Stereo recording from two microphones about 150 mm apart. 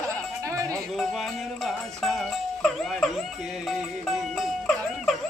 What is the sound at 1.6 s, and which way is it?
Music, centre (ahead or behind).